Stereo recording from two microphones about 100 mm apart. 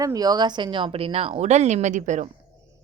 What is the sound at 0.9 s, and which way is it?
Speech, 75° right (ahead or behind).